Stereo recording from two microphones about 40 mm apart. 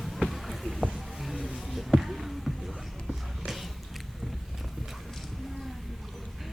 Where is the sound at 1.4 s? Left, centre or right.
Centre.